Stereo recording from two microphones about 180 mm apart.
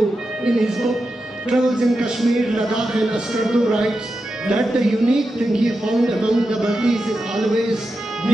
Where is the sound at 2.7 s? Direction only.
Centre (ahead or behind).